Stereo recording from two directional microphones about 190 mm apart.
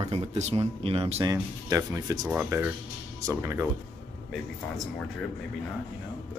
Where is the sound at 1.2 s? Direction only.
15° right (ahead or behind).